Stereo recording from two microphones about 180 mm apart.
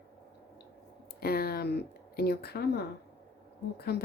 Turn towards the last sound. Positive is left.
turn(degrees=65)  # may be behind; listen again after turning